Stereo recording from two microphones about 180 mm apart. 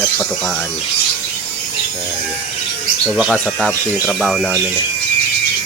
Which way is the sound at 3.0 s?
5° right (ahead or behind).